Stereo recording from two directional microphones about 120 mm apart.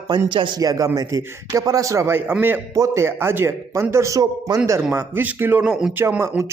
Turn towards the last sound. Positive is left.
turn(degrees=-20)  # may be behind; listen again after turning